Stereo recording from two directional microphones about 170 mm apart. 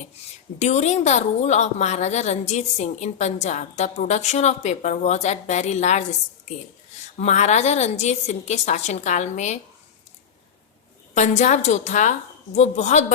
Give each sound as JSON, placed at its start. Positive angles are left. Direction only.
{"t": 0.6, "sound": "a woman's voice", "side_deg": 40}
{"t": 7.2, "sound": "a woman's voice", "side_deg": 40}
{"t": 11.1, "sound": "a woman's voice", "side_deg": 45}